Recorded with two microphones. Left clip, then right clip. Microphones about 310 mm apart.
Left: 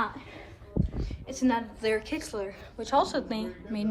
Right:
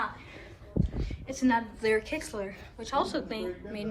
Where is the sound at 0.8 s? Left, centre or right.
Centre.